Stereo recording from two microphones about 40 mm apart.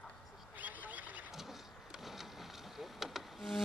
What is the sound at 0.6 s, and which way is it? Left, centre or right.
Duck, right.